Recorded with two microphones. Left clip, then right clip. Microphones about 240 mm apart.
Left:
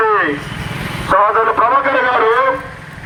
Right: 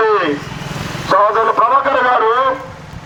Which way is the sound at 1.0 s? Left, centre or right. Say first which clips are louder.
Even; right.